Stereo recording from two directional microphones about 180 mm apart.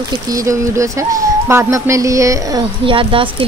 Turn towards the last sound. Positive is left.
turn(degrees=-30)  # may be behind; listen again after turning